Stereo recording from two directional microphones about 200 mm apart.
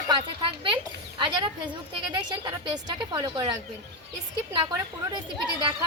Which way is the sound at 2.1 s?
20° right (ahead or behind).